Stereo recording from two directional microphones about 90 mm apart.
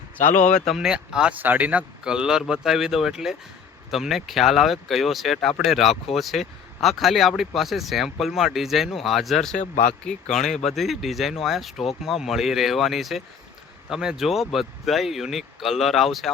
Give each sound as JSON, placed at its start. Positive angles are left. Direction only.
{"t": 0.2, "sound": "speech", "side_deg": 25}
{"t": 0.6, "sound": "a man's voice", "side_deg": -5}